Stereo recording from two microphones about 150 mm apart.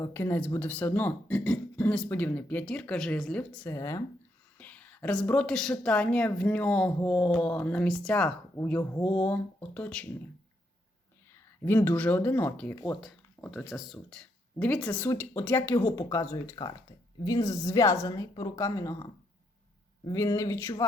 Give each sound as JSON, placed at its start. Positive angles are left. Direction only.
{"t": 0.0, "sound": "a woman's voice", "side_deg": 15}
{"t": 3.7, "sound": "a woman's voice", "side_deg": 20}
{"t": 11.6, "sound": "a woman's voice", "side_deg": 15}
{"t": 12.8, "sound": "a woman's voice", "side_deg": 0}
{"t": 20.1, "sound": "a woman's voice", "side_deg": 20}